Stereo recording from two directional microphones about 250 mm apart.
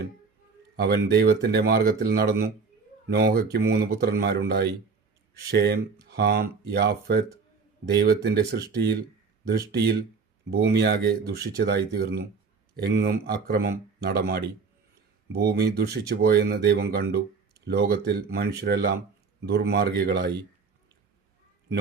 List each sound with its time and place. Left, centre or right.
0.8 s speech: right